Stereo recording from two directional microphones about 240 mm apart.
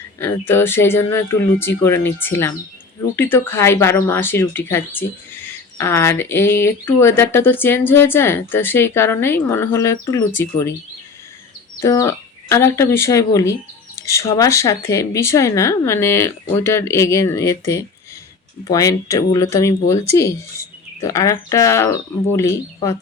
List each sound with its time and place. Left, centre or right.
0.2 s speech: centre
11.8 s speech: centre